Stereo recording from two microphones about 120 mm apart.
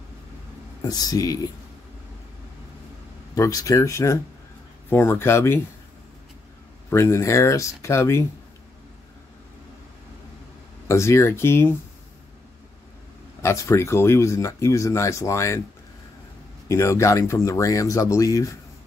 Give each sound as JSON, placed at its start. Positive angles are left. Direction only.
{"t": 0.8, "sound": "speech", "side_deg": 30}
{"t": 3.3, "sound": "speech", "side_deg": 30}
{"t": 6.9, "sound": "speech", "side_deg": 20}
{"t": 10.9, "sound": "speech", "side_deg": 25}
{"t": 13.4, "sound": "speech", "side_deg": 25}
{"t": 16.6, "sound": "speech", "side_deg": 25}